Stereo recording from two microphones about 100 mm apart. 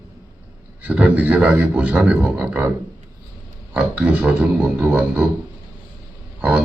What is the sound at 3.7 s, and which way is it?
A man's voice, 15° right (ahead or behind).